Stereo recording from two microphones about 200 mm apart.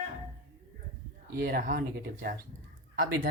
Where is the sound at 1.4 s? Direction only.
45° right (ahead or behind).